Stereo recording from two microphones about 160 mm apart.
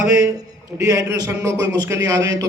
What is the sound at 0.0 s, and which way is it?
A man's voice, 15° right (ahead or behind).